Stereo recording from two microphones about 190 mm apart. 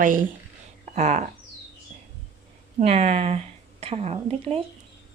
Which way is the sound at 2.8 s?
35° right (ahead or behind).